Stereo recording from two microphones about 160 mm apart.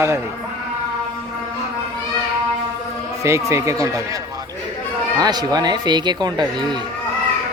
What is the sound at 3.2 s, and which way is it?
Speech, 15° right (ahead or behind).